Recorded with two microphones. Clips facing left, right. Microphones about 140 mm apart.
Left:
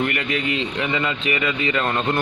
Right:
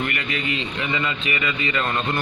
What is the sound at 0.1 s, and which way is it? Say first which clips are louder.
A man's voice: left 3 dB; 60° left (ahead or behind).